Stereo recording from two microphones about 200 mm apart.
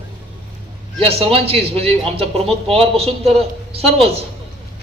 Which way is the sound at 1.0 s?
30° right (ahead or behind).